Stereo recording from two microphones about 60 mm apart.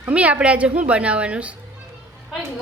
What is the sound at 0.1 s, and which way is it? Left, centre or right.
A woman's voice, right.